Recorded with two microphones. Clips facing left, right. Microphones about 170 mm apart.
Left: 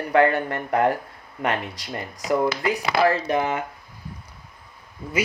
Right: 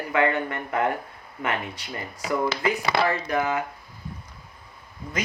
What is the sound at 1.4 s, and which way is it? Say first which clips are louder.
Speech: left 3 dB; 70° left (ahead or behind).